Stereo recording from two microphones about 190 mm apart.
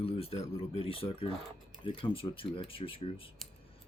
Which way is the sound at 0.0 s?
30° left (ahead or behind).